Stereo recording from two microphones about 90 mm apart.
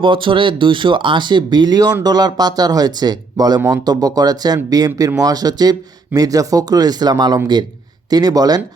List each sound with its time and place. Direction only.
0.0 s speech: 65° right (ahead or behind); by 8.6 s 45° right (ahead or behind)